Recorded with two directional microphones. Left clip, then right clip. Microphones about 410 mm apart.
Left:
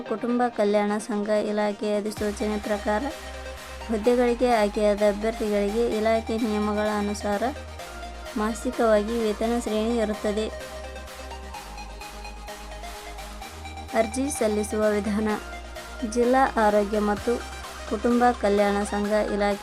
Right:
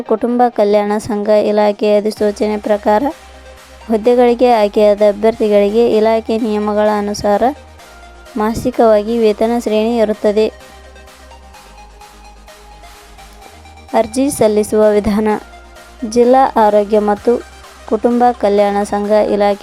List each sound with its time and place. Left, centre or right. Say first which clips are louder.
0.1 s a woman's voice: right 13 dB; centre
13.9 s a woman's voice: right 11 dB; centre
17.8 s speech: right 11 dB; centre
18.2 s a woman's voice: right 9 dB; centre